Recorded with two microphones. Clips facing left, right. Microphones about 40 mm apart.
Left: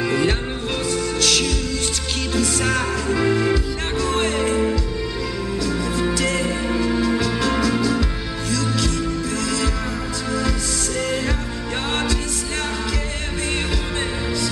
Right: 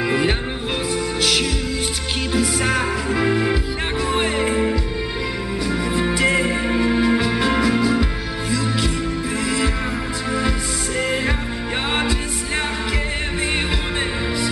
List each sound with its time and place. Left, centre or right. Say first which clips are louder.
0.0 s music: even; centre
11.0 s music: right 2 dB; centre